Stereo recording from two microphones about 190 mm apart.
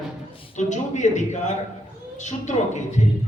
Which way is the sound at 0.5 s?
40° left (ahead or behind).